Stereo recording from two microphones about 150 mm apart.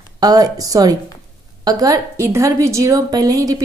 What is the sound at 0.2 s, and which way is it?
A woman's voice, 25° right (ahead or behind).